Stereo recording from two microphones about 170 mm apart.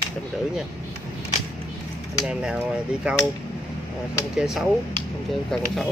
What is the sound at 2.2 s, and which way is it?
Speech, 5° right (ahead or behind).